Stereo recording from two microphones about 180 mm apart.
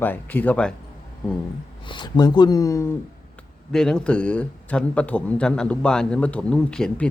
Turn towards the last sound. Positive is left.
turn(degrees=5)  # may be behind; listen again after turning